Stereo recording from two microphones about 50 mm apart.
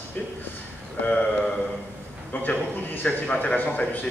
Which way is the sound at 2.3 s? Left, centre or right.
Left.